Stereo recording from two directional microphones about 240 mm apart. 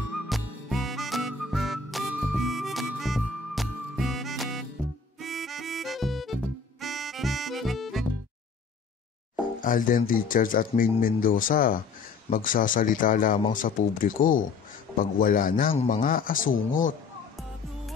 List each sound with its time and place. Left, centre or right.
0.3 s music: centre
9.6 s speech: left